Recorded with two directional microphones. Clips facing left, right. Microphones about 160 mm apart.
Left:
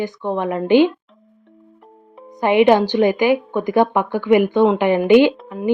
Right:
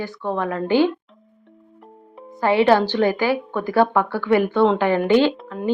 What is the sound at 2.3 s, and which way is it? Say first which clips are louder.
A woman's voice: left 3 dB; 20° left (ahead or behind).